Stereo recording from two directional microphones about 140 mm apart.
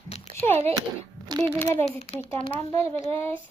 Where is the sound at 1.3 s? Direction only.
30° right (ahead or behind).